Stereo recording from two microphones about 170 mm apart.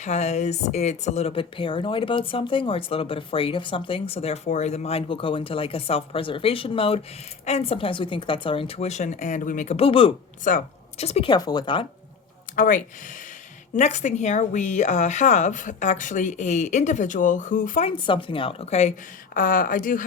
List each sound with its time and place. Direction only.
0.0 s speech: 40° left (ahead or behind)
10.4 s speech: 45° left (ahead or behind); by 11.9 s 30° left (ahead or behind)
12.5 s a woman's voice: 55° left (ahead or behind)
17.8 s speech: 30° left (ahead or behind)
19.3 s a woman's voice: 55° left (ahead or behind)